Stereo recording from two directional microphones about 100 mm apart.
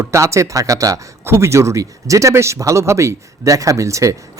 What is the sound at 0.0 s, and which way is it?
Speech, 30° right (ahead or behind).